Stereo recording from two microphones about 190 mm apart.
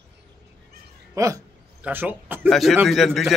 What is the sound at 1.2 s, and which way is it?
A man's voice, 15° right (ahead or behind).